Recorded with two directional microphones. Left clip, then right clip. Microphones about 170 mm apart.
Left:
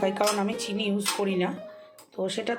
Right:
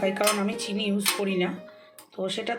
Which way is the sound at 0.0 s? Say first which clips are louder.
Even; 5° left (ahead or behind).